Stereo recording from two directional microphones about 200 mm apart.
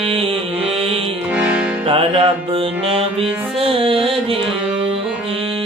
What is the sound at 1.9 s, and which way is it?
Music, 25° right (ahead or behind).